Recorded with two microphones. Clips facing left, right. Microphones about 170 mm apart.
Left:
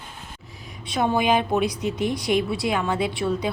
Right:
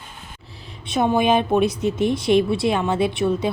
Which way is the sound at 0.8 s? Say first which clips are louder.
Right 3 dB; 20° right (ahead or behind).